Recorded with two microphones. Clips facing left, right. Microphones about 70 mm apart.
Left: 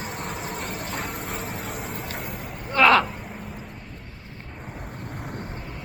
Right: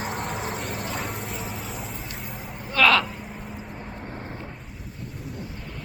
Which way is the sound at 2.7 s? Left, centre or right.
Left.